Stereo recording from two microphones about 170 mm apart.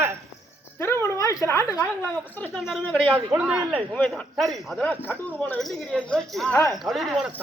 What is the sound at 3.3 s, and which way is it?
Speech, 5° right (ahead or behind).